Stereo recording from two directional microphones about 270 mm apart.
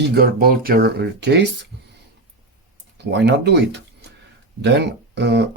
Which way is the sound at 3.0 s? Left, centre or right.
Right.